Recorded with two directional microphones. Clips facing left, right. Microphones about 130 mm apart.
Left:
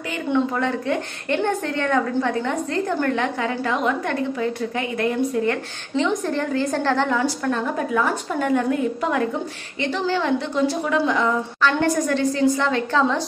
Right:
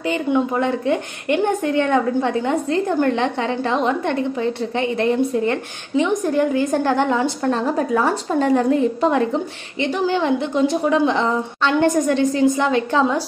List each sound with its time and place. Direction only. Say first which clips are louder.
0.3 s a woman's voice: right 1 dB; 20° right (ahead or behind)
7.4 s a woman's voice: right 4 dB; 35° right (ahead or behind)
9.8 s a woman's voice: right 3 dB; 15° right (ahead or behind)